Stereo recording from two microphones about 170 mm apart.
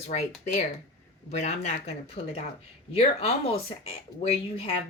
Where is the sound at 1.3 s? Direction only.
40° left (ahead or behind).